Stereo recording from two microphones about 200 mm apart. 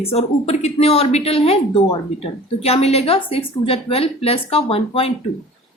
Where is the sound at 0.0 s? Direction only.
30° left (ahead or behind).